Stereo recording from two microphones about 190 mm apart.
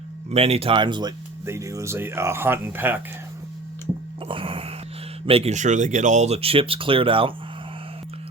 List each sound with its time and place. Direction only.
0.3 s speech: 30° right (ahead or behind); by 3.0 s 10° right (ahead or behind)
4.3 s wail: 25° right (ahead or behind)
5.2 s speech: 30° right (ahead or behind)